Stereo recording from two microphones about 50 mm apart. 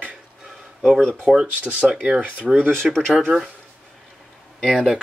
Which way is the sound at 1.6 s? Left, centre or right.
Right.